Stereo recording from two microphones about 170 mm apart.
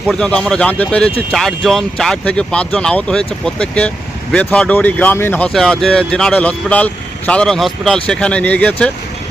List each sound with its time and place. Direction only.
0.1 s speech: 5° left (ahead or behind)